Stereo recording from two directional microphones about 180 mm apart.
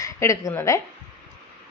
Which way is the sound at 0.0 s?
15° left (ahead or behind).